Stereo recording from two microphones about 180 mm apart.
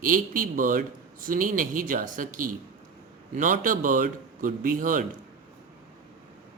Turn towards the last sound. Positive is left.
turn(degrees=-50)  # may be behind; listen again after turning